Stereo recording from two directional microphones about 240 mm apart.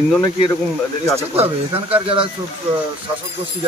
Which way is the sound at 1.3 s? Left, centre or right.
Right.